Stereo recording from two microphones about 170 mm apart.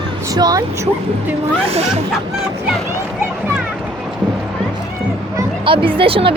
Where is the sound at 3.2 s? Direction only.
10° right (ahead or behind).